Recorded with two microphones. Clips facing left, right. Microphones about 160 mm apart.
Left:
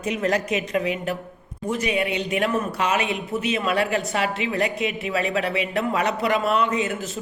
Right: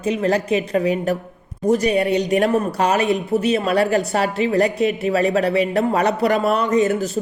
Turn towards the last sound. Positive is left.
turn(degrees=-40)  # may be behind; listen again after turning